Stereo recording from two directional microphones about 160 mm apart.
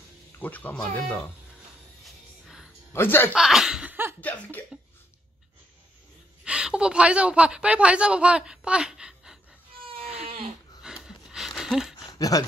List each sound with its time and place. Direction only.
0.4 s speech: 10° left (ahead or behind)
2.0 s music: centre (ahead or behind)
2.9 s speech: 15° left (ahead or behind)
3.3 s laughter: 5° right (ahead or behind)
4.2 s speech: 10° left (ahead or behind)
6.4 s a woman's voice: 5° right (ahead or behind)
9.9 s a sound: 40° right (ahead or behind)
10.8 s a sound: 5° right (ahead or behind)
12.1 s speech: 25° left (ahead or behind)